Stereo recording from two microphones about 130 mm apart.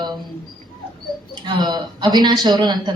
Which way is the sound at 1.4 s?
35° right (ahead or behind).